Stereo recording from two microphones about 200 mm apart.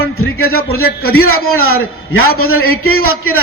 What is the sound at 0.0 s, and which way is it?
A man's voice, 90° left.